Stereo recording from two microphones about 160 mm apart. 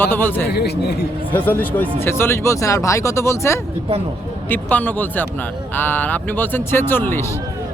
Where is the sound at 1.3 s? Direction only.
10° left (ahead or behind).